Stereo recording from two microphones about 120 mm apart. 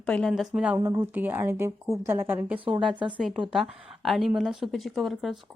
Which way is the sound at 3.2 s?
5° right (ahead or behind).